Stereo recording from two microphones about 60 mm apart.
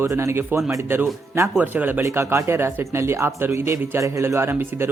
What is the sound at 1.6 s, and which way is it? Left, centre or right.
Speech, right.